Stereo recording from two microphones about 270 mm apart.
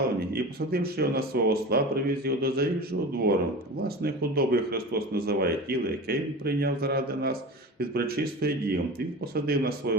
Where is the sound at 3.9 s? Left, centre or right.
Right.